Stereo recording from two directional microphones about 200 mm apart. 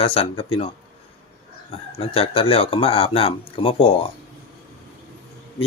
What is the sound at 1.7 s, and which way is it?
Speech, 30° left (ahead or behind).